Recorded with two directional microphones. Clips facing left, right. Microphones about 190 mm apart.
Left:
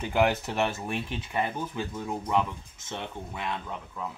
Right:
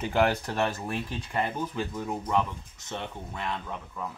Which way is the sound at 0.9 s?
20° left (ahead or behind).